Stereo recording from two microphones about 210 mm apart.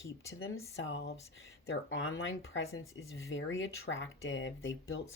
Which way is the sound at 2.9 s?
65° left (ahead or behind).